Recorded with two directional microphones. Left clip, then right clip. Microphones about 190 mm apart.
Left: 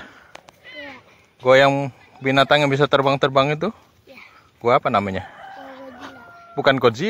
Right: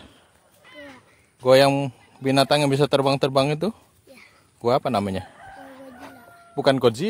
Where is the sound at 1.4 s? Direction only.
30° right (ahead or behind).